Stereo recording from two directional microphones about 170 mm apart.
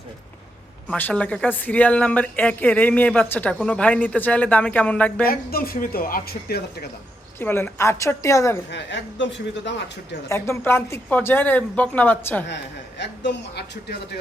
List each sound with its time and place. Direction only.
0.9 s speech: 10° left (ahead or behind)
5.2 s speech: 60° left (ahead or behind)
7.3 s speech: 15° left (ahead or behind)
8.7 s speech: 90° left
10.2 s speech: 15° left (ahead or behind)
13.0 s speech: 90° left; by 14.0 s 75° left (ahead or behind)